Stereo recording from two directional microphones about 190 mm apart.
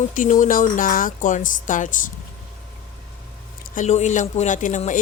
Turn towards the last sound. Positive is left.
turn(degrees=40)  # may be behind; listen again after turning